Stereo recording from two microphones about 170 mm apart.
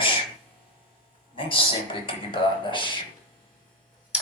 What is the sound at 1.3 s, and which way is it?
Speech, 30° left (ahead or behind).